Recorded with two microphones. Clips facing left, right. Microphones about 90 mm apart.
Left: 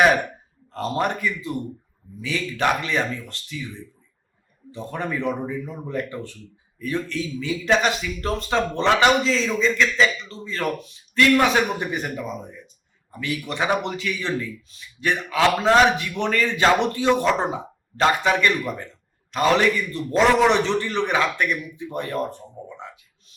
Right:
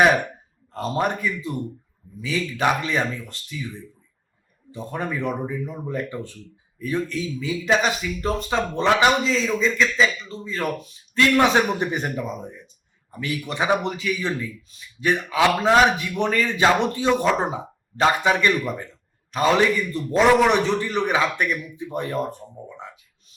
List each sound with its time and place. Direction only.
0.9 s a man's voice: 10° right (ahead or behind)
4.7 s a man's voice: 10° right (ahead or behind)
13.1 s a sound: 20° right (ahead or behind)
13.5 s a man's voice: 15° right (ahead or behind)